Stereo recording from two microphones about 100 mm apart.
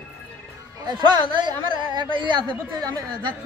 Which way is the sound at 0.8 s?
50° right (ahead or behind).